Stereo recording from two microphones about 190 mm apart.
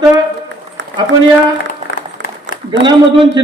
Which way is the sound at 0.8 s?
70° right (ahead or behind).